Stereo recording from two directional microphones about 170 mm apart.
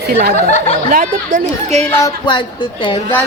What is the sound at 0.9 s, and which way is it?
Speech, 50° right (ahead or behind).